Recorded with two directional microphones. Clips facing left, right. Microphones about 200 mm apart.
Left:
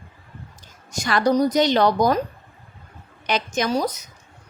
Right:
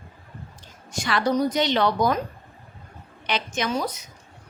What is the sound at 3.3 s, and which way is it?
Speech, 40° left (ahead or behind).